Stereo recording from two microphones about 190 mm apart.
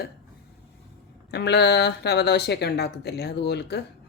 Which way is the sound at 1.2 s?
60° left (ahead or behind).